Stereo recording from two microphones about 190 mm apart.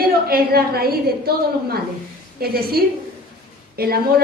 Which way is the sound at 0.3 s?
55° right (ahead or behind).